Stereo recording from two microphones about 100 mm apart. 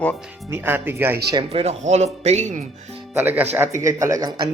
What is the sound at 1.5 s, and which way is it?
Speech, 85° right.